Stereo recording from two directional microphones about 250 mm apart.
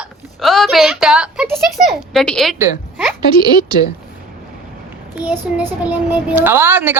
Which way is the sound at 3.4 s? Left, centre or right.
Centre.